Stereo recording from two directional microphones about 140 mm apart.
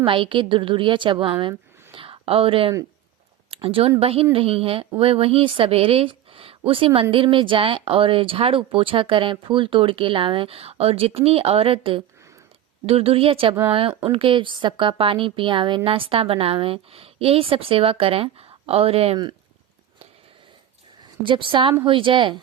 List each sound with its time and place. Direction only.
0.0 s a woman's voice: 40° right (ahead or behind)
19.1 s a woman's voice: 30° right (ahead or behind)
21.2 s a woman's voice: 35° right (ahead or behind)